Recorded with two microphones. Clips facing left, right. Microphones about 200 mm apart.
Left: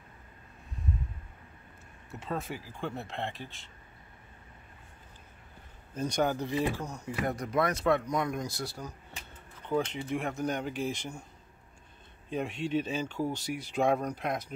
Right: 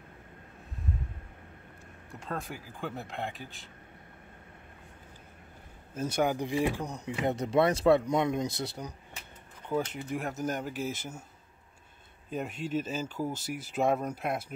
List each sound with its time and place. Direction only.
2.0 s speech: 5° left (ahead or behind)
5.9 s speech: 5° right (ahead or behind)
9.9 s speech: 5° right (ahead or behind)
12.3 s speech: 5° right (ahead or behind)